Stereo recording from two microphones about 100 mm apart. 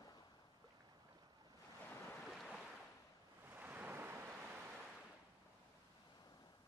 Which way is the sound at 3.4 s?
15° right (ahead or behind).